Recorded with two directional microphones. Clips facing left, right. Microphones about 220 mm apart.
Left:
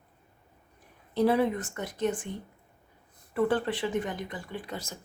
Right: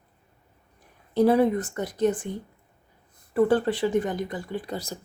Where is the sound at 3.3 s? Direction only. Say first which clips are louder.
Right 6 dB; 40° right (ahead or behind).